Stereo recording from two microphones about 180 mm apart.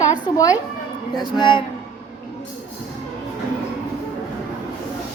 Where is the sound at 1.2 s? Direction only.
25° left (ahead or behind).